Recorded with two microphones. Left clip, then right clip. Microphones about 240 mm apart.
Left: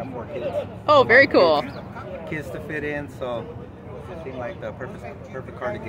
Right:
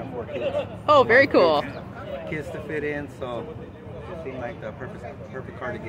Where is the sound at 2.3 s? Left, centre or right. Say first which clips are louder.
Left 1 dB; centre.